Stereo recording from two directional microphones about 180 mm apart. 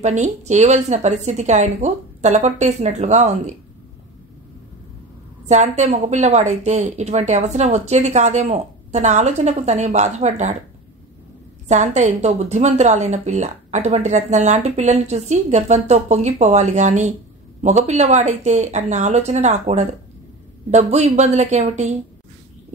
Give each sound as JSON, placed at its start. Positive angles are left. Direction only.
{"t": 0.0, "sound": "a woman's voice", "side_deg": -40}
{"t": 5.5, "sound": "a woman's voice", "side_deg": -40}
{"t": 11.6, "sound": "a woman's voice", "side_deg": -40}